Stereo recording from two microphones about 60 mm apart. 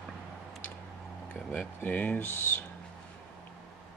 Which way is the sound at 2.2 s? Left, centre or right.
Left.